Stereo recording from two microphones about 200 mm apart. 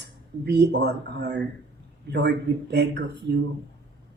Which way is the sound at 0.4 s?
55° right (ahead or behind).